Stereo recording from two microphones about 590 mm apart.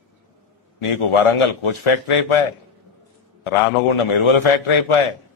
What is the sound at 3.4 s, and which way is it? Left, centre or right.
A man's voice, left.